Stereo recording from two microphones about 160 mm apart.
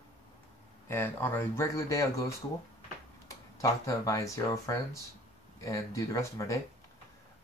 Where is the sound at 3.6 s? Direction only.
20° left (ahead or behind).